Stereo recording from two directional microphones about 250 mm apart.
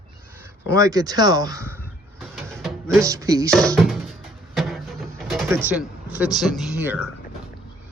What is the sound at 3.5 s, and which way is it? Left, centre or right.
Speech, centre.